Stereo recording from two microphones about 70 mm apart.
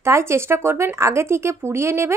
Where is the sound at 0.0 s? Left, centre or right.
Right.